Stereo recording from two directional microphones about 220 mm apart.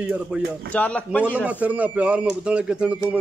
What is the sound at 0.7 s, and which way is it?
Speech, 5° left (ahead or behind).